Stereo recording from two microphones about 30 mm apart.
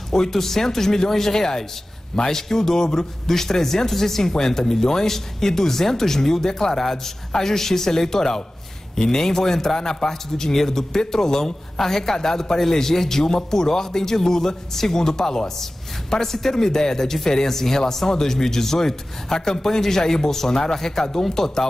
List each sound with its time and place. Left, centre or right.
0.1 s a man's voice: centre